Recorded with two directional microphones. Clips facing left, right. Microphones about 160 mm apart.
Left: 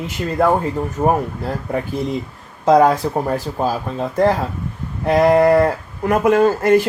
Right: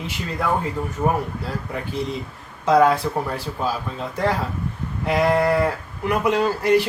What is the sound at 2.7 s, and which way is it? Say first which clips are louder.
Speech: left 4 dB; 40° left (ahead or behind).